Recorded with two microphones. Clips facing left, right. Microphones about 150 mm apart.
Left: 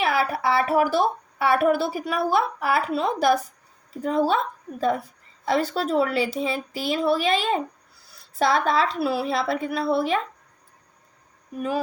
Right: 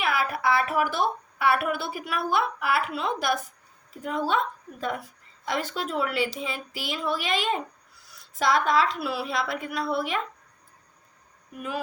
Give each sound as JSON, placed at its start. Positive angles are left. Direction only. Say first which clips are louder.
{"t": 0.0, "sound": "a woman's voice", "louder": "left 3 dB", "side_deg": 30}
{"t": 5.5, "sound": "a woman's voice", "louder": "left 7 dB", "side_deg": 35}
{"t": 11.5, "sound": "a woman's voice", "louder": "left 6 dB", "side_deg": 35}